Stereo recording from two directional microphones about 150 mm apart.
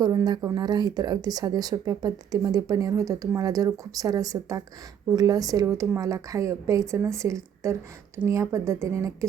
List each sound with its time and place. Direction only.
0.0 s speech: 25° right (ahead or behind)